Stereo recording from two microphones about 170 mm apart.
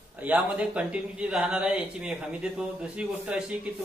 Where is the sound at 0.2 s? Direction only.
5° right (ahead or behind).